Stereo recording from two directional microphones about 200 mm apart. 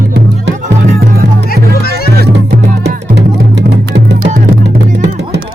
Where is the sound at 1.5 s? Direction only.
50° left (ahead or behind).